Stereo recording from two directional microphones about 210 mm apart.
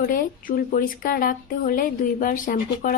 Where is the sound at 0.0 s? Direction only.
40° left (ahead or behind).